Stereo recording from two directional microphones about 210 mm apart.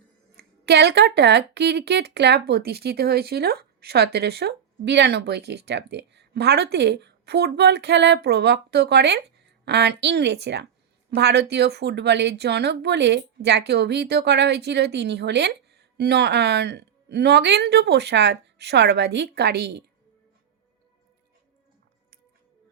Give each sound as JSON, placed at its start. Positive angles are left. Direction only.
{"t": 0.3, "sound": "a woman's voice", "side_deg": -50}